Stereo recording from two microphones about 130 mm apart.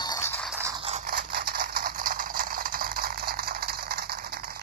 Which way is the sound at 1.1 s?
90° right.